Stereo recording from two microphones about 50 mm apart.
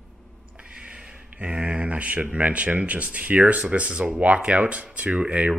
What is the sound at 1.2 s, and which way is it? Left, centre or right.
Speech, right.